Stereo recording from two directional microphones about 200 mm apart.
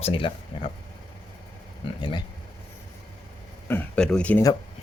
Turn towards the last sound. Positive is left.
turn(degrees=5)  # may be behind; listen again after turning